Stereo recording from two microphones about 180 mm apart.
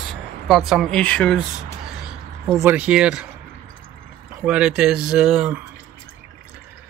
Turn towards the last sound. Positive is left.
turn(degrees=-5)  # may be behind; listen again after turning